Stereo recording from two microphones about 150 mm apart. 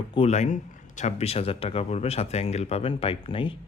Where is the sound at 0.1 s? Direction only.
45° left (ahead or behind).